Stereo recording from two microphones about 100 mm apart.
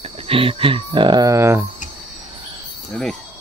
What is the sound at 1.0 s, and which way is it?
Speech, 50° right (ahead or behind).